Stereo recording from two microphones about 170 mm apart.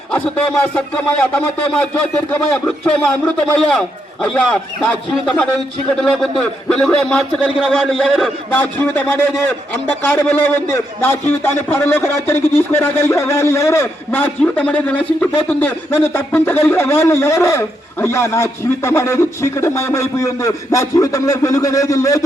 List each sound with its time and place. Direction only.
0.1 s a man's voice: 10° left (ahead or behind)